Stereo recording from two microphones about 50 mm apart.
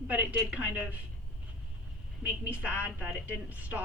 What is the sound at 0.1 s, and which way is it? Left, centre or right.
Speech, right.